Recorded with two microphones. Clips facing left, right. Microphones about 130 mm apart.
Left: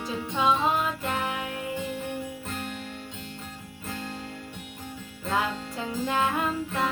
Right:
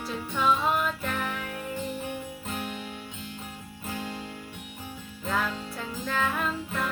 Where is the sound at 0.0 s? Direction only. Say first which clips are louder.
Left 1 dB; 15° left (ahead or behind).